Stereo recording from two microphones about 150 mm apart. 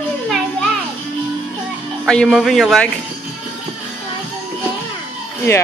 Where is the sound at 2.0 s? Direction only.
5° left (ahead or behind).